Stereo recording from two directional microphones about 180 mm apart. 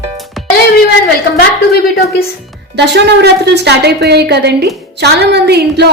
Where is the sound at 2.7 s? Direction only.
70° right (ahead or behind).